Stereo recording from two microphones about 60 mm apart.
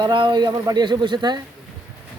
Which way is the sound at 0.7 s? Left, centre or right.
Right.